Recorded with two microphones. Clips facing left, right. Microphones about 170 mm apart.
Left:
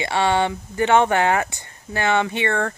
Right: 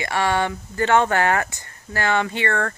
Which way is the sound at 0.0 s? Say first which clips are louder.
Left 2 dB; 20° left (ahead or behind).